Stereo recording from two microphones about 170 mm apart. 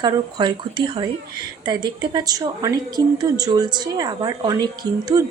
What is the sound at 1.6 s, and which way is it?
Speech, 25° right (ahead or behind).